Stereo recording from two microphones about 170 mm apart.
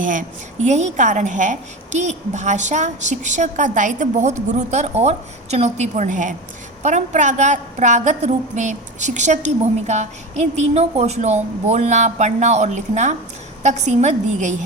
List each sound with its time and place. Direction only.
0.0 s a woman's voice: 50° right (ahead or behind)